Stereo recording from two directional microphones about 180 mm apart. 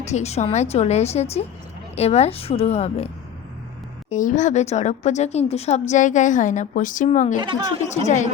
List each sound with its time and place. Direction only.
0.0 s a woman's voice: 35° left (ahead or behind)
4.1 s a woman's voice: 45° left (ahead or behind)
7.4 s speech: 25° right (ahead or behind)
7.9 s a woman's voice: 40° left (ahead or behind)